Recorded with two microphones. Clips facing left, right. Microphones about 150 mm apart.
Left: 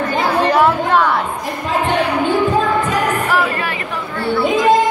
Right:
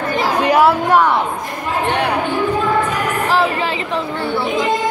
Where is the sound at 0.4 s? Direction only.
10° right (ahead or behind).